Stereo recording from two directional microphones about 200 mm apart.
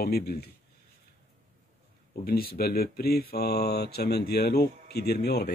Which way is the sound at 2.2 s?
50° left (ahead or behind).